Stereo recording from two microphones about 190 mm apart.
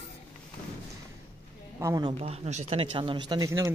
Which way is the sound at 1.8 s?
20° right (ahead or behind).